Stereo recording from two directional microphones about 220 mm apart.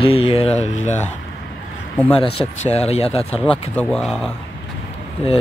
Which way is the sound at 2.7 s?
30° left (ahead or behind).